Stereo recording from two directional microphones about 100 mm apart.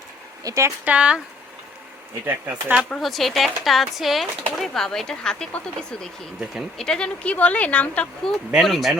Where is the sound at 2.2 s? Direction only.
20° right (ahead or behind).